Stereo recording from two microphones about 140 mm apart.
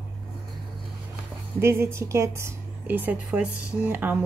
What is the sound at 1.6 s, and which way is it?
Speech, 20° right (ahead or behind).